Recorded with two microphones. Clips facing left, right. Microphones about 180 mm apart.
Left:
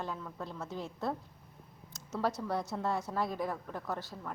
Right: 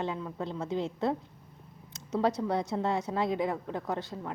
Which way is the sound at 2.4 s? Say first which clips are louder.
Right 5 dB; 20° right (ahead or behind).